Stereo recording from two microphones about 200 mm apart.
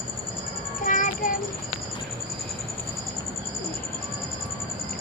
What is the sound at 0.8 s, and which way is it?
Child singing, 40° left (ahead or behind).